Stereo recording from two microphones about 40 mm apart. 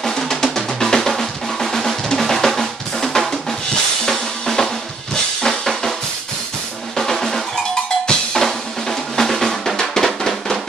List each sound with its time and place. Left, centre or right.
0.2 s drum: centre
4.0 s drum kit: centre
7.0 s drum: centre